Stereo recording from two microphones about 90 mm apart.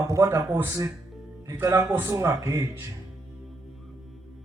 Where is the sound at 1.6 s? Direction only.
35° right (ahead or behind).